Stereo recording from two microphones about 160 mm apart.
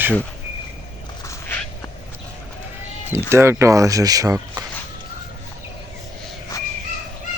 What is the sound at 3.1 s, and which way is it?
Speech, 15° right (ahead or behind).